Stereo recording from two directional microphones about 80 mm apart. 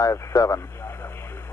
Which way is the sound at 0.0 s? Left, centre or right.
Left.